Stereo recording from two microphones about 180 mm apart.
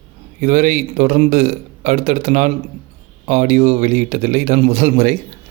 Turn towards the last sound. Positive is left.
turn(degrees=-35)  # may be behind; listen again after turning